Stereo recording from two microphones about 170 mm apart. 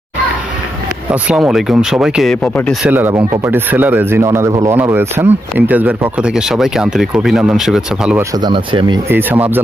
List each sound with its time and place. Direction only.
1.1 s speech: 5° right (ahead or behind)
2.8 s speech: 10° right (ahead or behind)
8.4 s speech: 25° right (ahead or behind)
9.0 s speech: 10° right (ahead or behind)